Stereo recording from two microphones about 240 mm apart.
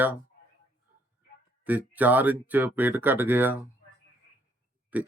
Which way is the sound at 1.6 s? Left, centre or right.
Centre.